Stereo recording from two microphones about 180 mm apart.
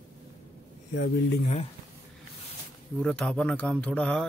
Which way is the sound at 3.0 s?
5° left (ahead or behind).